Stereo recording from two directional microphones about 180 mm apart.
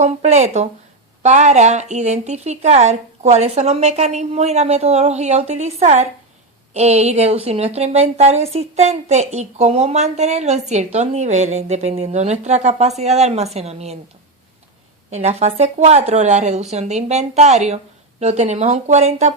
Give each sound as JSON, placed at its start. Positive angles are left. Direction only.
{"t": 0.0, "sound": "a woman's voice", "side_deg": -40}
{"t": 15.1, "sound": "a woman's voice", "side_deg": -35}